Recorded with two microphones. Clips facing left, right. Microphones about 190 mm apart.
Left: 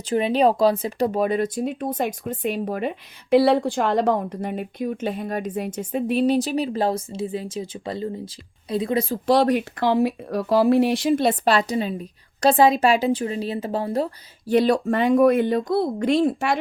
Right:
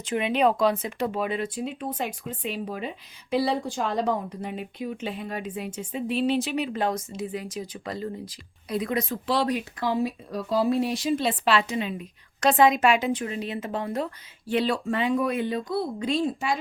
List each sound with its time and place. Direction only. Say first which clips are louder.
0.0 s speech: left 4 dB; 35° left (ahead or behind)
9.2 s speech: left 9 dB; 45° left (ahead or behind)
9.8 s speech: left 6 dB; 70° left (ahead or behind)
11.1 s a woman's voice: left 4 dB; 45° left (ahead or behind)
15.7 s speech: left 6 dB; 70° left (ahead or behind)